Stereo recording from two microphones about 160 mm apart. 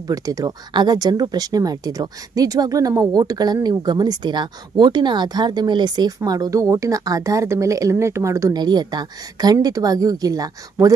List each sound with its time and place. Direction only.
0.0 s speech: 20° right (ahead or behind)